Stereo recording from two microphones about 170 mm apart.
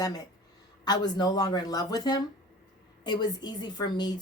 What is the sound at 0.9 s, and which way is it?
A woman's voice, 25° left (ahead or behind).